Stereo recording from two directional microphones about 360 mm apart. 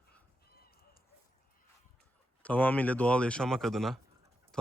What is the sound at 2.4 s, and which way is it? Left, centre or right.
Speech, centre.